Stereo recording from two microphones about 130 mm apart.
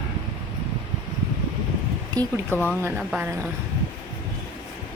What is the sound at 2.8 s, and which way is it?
Speech, 15° right (ahead or behind).